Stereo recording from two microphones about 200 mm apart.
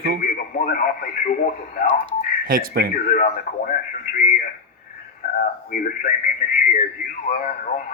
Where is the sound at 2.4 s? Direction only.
45° right (ahead or behind).